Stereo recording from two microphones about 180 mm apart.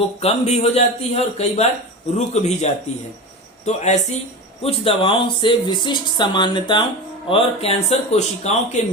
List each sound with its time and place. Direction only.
0.2 s speech: 35° left (ahead or behind)
3.7 s speech: 40° left (ahead or behind)